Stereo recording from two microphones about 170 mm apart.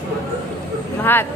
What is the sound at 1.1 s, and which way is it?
Speech, 10° left (ahead or behind).